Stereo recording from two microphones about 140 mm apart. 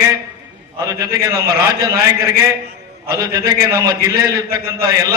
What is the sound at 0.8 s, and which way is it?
Speech, 25° right (ahead or behind).